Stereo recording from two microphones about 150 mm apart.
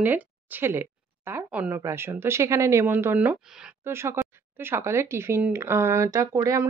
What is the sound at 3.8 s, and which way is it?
Speech, 15° right (ahead or behind).